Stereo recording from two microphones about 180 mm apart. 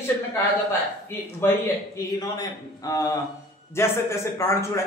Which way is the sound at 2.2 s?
20° left (ahead or behind).